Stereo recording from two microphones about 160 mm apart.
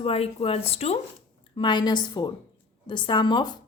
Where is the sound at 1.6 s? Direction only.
30° left (ahead or behind).